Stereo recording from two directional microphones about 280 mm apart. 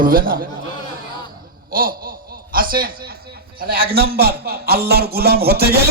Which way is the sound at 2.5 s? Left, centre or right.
Right.